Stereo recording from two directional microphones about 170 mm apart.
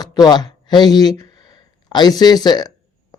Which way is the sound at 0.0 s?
20° left (ahead or behind).